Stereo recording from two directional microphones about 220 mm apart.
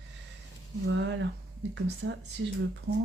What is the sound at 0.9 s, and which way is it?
Speech, 55° right (ahead or behind).